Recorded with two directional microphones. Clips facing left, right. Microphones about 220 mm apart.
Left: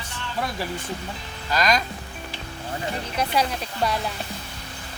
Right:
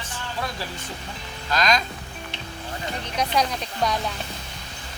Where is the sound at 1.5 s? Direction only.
10° left (ahead or behind).